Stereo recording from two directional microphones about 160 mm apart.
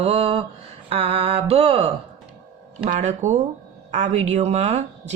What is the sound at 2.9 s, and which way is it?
A woman's voice, 50° right (ahead or behind).